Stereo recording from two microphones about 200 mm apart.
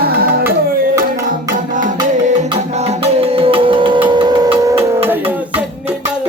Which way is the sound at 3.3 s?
30° right (ahead or behind).